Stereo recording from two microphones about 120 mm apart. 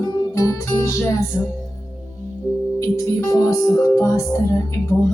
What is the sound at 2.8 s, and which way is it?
Music, 25° left (ahead or behind).